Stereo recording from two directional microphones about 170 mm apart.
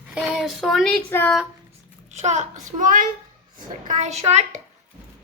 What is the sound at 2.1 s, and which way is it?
A child's voice, 45° right (ahead or behind).